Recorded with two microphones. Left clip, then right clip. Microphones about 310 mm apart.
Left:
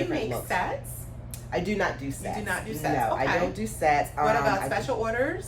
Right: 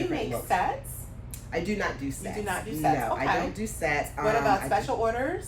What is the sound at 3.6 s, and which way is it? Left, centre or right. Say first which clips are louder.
Speech: left 4 dB; centre.